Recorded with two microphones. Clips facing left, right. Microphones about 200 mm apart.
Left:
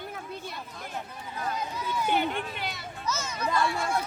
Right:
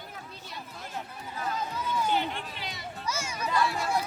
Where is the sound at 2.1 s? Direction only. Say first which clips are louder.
Left 2 dB; 60° left (ahead or behind).